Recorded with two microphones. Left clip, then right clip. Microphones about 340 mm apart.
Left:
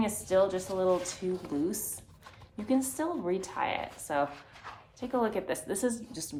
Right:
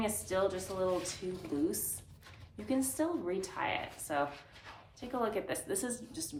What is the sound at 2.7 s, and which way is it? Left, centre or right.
Speech, left.